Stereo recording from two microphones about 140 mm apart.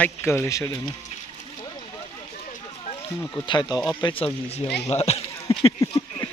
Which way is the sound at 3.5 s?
30° left (ahead or behind).